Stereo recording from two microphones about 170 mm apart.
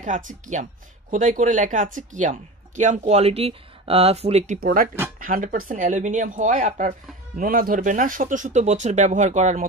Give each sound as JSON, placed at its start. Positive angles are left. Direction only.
{"t": 0.0, "sound": "speech", "side_deg": -45}
{"t": 4.6, "sound": "speech", "side_deg": -55}